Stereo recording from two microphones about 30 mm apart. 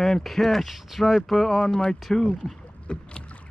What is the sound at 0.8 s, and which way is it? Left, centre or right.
Speech, centre.